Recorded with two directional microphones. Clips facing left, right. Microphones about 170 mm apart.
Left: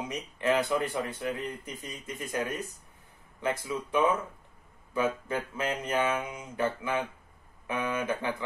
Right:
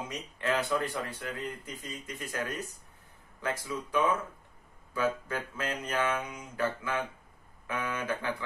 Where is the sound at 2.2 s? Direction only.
25° left (ahead or behind).